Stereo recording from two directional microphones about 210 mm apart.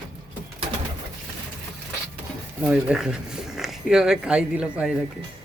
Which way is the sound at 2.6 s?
5° right (ahead or behind).